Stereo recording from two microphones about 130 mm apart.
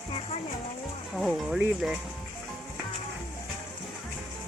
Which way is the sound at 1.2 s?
Centre (ahead or behind).